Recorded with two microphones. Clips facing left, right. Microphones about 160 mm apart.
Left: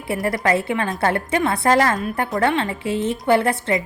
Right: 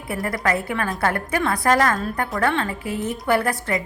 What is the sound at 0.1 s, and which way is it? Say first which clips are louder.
A woman's voice: left 3 dB; 25° left (ahead or behind).